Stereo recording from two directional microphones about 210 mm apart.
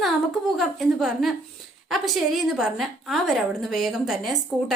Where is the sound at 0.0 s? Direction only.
Centre (ahead or behind).